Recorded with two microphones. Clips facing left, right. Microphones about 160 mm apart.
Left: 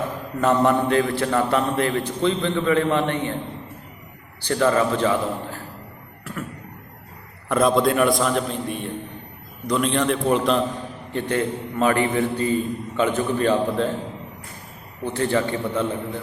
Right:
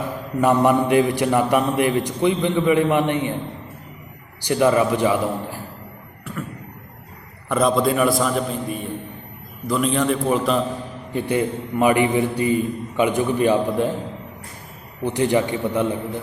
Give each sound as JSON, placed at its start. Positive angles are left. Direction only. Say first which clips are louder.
{"t": 0.4, "sound": "a man's voice", "louder": "right 2 dB", "side_deg": -10}
{"t": 4.4, "sound": "a man's voice", "louder": "right 2 dB", "side_deg": -15}
{"t": 6.3, "sound": "a sound", "louder": "right 1 dB", "side_deg": 5}
{"t": 7.4, "sound": "a man's voice", "louder": "even", "side_deg": 0}
{"t": 15.0, "sound": "a man's voice", "louder": "right 3 dB", "side_deg": -15}